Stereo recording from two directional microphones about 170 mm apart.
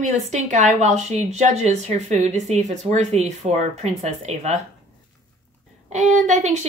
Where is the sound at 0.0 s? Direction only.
45° right (ahead or behind).